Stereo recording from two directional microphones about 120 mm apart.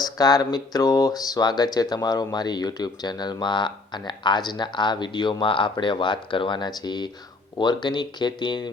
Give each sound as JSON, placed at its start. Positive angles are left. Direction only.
{"t": 0.2, "sound": "speech", "side_deg": 35}